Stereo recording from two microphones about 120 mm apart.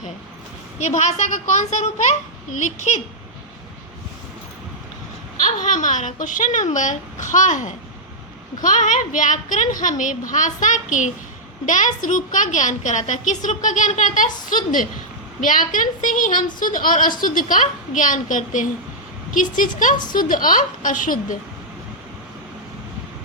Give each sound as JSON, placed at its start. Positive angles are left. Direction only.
{"t": 0.8, "sound": "a child's voice", "side_deg": 75}
{"t": 5.5, "sound": "a woman's voice", "side_deg": 90}